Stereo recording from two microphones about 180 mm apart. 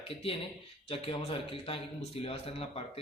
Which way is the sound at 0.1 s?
30° left (ahead or behind).